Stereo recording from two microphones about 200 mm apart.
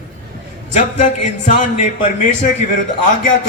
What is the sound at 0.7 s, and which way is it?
A man's voice, 35° left (ahead or behind).